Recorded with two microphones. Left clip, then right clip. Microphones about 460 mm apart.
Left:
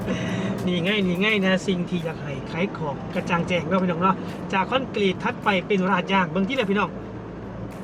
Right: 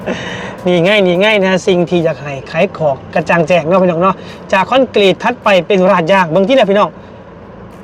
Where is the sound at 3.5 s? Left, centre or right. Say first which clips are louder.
Right 14 dB; right.